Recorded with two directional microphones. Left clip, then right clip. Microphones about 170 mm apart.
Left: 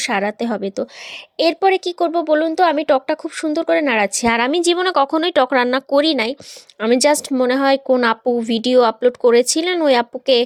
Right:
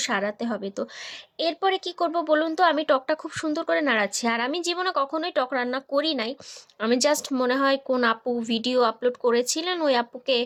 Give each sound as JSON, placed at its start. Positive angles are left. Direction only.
{"t": 0.0, "sound": "speech", "side_deg": 40}